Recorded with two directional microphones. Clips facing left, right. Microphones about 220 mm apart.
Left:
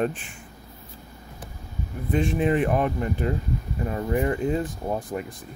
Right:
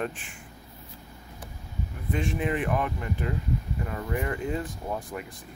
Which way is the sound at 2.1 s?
30° left (ahead or behind).